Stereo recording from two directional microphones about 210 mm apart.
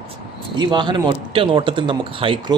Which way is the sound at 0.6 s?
20° right (ahead or behind).